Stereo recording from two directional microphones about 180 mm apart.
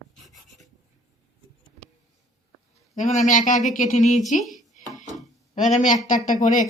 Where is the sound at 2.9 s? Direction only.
45° left (ahead or behind).